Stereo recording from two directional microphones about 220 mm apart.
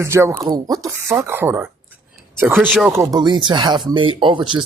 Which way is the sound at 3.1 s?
20° right (ahead or behind).